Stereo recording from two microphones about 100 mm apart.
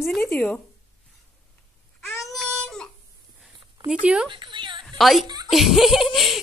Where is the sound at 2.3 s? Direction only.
5° left (ahead or behind).